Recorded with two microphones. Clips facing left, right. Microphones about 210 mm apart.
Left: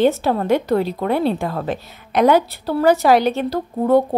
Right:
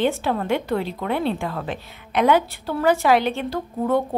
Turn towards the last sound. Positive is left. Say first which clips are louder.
# left 6 dB
turn(degrees=35)  # may be behind; listen again after turning